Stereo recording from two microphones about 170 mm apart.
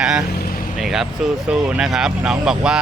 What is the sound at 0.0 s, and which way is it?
Vehicle, 5° right (ahead or behind).